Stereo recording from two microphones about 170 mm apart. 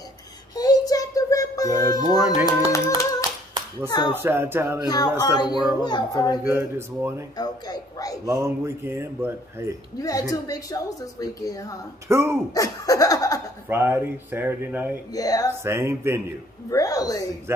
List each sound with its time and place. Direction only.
0.6 s music: 20° left (ahead or behind)
4.1 s speech: 15° right (ahead or behind)
4.8 s a woman's voice: 25° left (ahead or behind)
6.4 s speech: 15° right (ahead or behind)
7.3 s a man's voice: 25° left (ahead or behind)
8.3 s speech: 15° right (ahead or behind)
9.9 s a woman's voice: 20° left (ahead or behind)
12.1 s speech: 15° right (ahead or behind)
12.5 s a woman's voice: 20° left (ahead or behind)
13.7 s speech: 15° right (ahead or behind)
15.1 s a woman's voice: 20° left (ahead or behind)
15.6 s speech: 15° right (ahead or behind)
16.7 s a woman's voice: 20° left (ahead or behind)
17.5 s a man's voice: 15° right (ahead or behind)